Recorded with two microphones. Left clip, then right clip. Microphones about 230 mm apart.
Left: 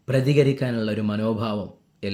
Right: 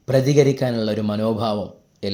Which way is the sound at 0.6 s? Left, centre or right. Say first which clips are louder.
Right 4 dB; centre.